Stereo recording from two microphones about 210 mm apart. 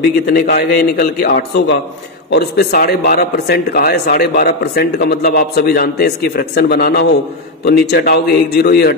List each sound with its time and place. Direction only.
0.3 s a man's voice: 45° left (ahead or behind)